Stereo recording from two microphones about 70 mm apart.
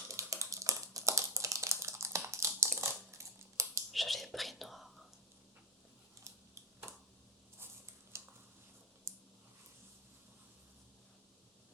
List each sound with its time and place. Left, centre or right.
0.1 s typing: right
2.6 s crushing: right
3.9 s whispering: centre
6.5 s finger snapping: right
8.1 s a sound: right